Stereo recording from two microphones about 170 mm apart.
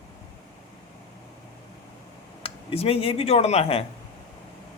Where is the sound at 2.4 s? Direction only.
35° left (ahead or behind).